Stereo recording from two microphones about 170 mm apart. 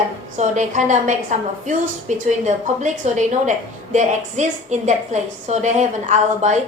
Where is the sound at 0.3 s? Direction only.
45° right (ahead or behind).